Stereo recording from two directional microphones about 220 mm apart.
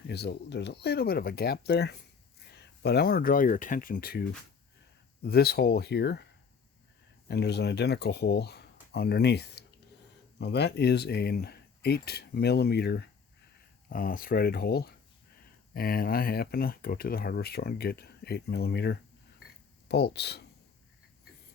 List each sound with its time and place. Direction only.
0.1 s speech: 50° left (ahead or behind)
5.2 s speech: 45° left (ahead or behind)
7.3 s speech: 50° left (ahead or behind)